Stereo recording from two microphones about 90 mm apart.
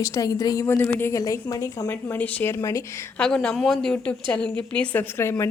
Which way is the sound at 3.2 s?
10° left (ahead or behind).